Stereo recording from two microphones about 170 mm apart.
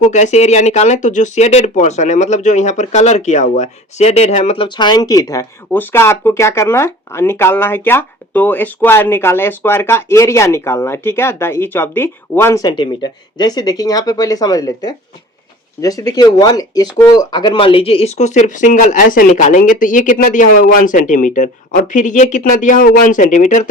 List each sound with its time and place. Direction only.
0.0 s speech: 45° left (ahead or behind)